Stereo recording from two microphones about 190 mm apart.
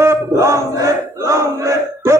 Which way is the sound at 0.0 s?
15° right (ahead or behind).